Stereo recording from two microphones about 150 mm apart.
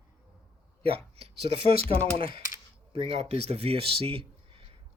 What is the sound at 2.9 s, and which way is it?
Speech, 40° right (ahead or behind).